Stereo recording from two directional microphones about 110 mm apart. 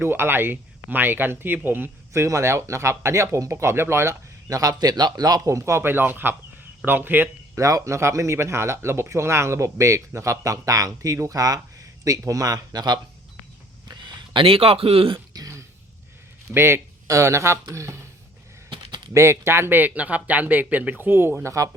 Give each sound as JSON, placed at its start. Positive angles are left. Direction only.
{"t": 0.0, "sound": "speech", "side_deg": -20}
{"t": 7.5, "sound": "speech", "side_deg": -30}
{"t": 15.3, "sound": "throat clearing", "side_deg": -30}
{"t": 16.5, "sound": "speech", "side_deg": -20}
{"t": 19.1, "sound": "speech", "side_deg": -25}